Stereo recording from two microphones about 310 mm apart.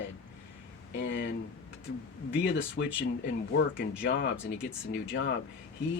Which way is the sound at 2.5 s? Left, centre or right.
Left.